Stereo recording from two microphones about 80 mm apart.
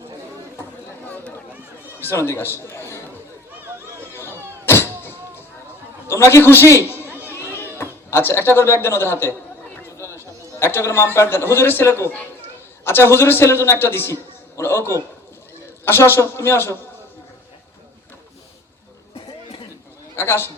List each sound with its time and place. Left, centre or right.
2.0 s a man's voice: left
4.1 s a sound: left
6.1 s a man's voice: left
7.0 s chatter: left
7.8 s a man's voice: left
20.1 s a man's voice: left